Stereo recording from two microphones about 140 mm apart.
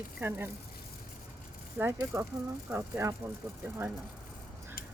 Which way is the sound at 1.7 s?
15° right (ahead or behind).